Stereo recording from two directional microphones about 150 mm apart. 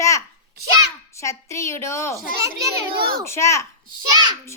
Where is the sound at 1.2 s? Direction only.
20° left (ahead or behind).